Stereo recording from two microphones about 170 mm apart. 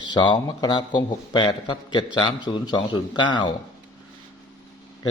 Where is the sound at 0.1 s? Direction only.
25° left (ahead or behind).